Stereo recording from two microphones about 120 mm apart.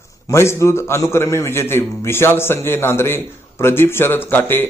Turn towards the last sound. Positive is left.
turn(degrees=15)  # may be behind; listen again after turning